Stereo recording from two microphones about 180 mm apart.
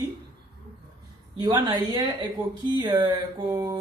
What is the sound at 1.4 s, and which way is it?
A woman's voice, 25° right (ahead or behind).